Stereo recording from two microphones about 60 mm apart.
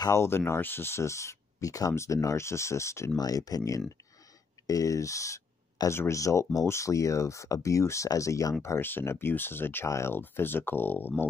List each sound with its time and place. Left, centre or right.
0.1 s speech: left
3.2 s speech: left
4.6 s speech: left
8.6 s speech: left
9.8 s speech: left
10.1 s speech: left